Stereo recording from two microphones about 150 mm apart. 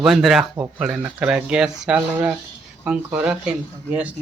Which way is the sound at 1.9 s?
15° right (ahead or behind).